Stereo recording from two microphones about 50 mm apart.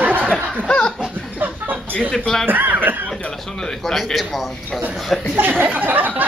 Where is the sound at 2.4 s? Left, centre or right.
Right.